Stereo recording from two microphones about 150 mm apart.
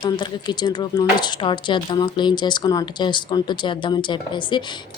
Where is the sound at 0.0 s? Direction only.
30° left (ahead or behind).